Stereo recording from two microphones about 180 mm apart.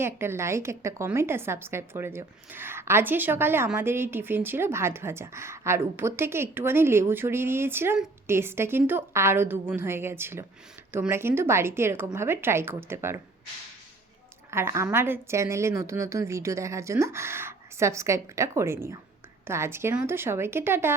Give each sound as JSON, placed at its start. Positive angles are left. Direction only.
{"t": 0.0, "sound": "a woman's voice", "side_deg": -15}
{"t": 14.5, "sound": "a woman's voice", "side_deg": -15}